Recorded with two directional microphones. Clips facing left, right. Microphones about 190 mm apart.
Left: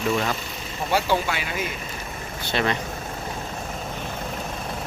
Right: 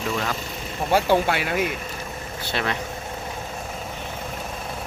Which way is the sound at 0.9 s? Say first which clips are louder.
Right 4 dB; 55° right (ahead or behind).